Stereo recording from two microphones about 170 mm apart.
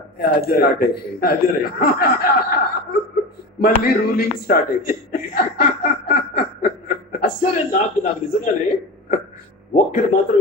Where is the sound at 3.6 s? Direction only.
60° left (ahead or behind).